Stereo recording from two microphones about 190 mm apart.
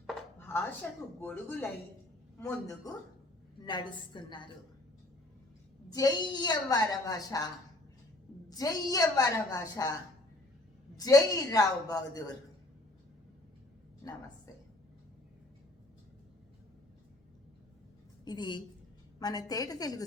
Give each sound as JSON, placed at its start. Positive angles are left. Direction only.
{"t": 0.3, "sound": "chopping", "side_deg": 10}
{"t": 1.2, "sound": "a woman's voice", "side_deg": 10}
{"t": 5.9, "sound": "a woman's voice", "side_deg": 20}
{"t": 10.9, "sound": "a woman's voice", "side_deg": 20}
{"t": 18.3, "sound": "a woman's voice", "side_deg": 25}